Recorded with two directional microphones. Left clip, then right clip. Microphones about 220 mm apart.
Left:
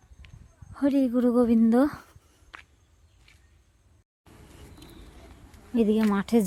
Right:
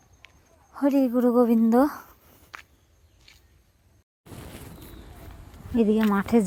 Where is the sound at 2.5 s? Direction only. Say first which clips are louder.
Right 3 dB; 40° right (ahead or behind).